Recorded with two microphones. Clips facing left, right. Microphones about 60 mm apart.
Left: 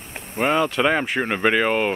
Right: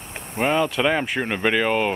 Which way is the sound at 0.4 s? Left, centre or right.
Centre.